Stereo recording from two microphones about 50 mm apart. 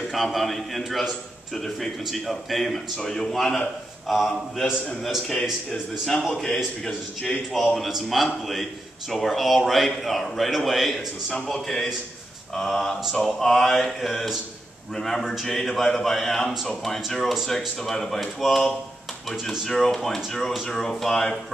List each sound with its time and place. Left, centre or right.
0.1 s a man's voice: centre
5.3 s a man's voice: left
6.3 s a man's voice: centre